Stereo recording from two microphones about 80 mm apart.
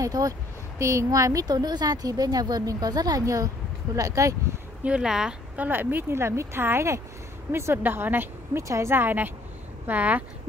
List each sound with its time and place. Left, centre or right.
0.0 s a woman's voice: right
4.8 s speech: centre
5.6 s speech: right
8.6 s speech: right